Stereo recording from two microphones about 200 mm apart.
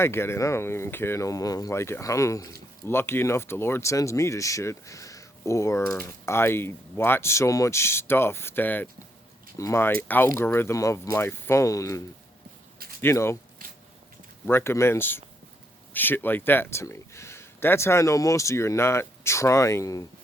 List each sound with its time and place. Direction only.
0.0 s speech: 10° left (ahead or behind)
13.6 s a sound: 45° right (ahead or behind)
14.4 s speech: 10° left (ahead or behind)